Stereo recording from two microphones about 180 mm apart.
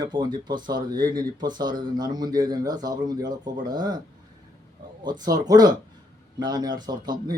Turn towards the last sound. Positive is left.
turn(degrees=-20)  # may be behind; listen again after turning